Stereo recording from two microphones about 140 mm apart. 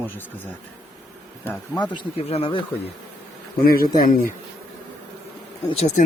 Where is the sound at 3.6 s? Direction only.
90° left.